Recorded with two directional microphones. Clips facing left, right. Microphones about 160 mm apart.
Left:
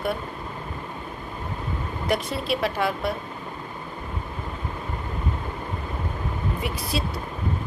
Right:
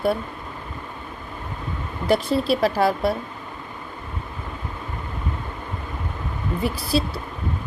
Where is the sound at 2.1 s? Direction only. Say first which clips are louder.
Right 6 dB; 30° right (ahead or behind).